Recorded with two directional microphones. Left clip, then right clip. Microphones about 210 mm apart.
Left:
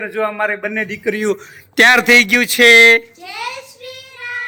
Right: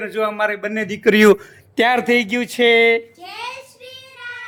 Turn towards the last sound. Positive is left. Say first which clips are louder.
# left 7 dB
turn(degrees=0)  # may be behind; listen again after turning